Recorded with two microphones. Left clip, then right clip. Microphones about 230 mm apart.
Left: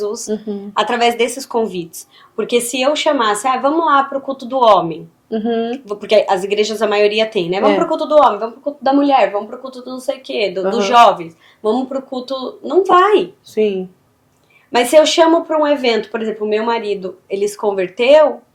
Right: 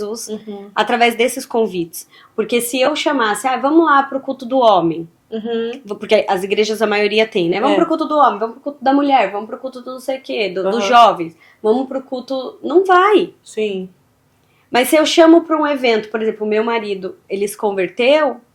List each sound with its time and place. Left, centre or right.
0.0 s speech: right
5.3 s speech: left
5.7 s speech: right
13.6 s speech: left
14.7 s speech: right